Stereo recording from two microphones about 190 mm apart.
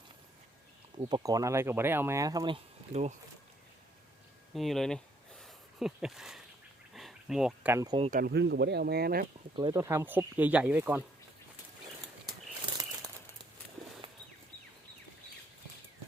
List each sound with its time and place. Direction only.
1.0 s speech: 20° right (ahead or behind)
4.5 s a sound: centre (ahead or behind)
8.1 s speech: 55° right (ahead or behind)
9.6 s speech: 20° right (ahead or behind)